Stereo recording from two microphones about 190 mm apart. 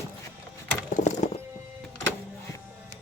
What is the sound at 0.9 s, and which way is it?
Music, 40° left (ahead or behind).